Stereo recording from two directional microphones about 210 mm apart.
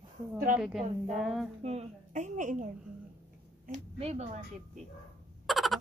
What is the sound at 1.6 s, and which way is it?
A woman's voice, 30° right (ahead or behind).